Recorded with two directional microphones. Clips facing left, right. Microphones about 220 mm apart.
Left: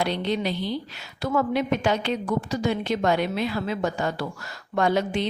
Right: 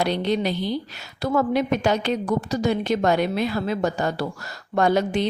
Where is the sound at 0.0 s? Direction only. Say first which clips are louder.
Right 3 dB; 40° right (ahead or behind).